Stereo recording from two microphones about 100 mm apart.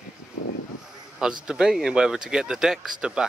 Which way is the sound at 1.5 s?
5° right (ahead or behind).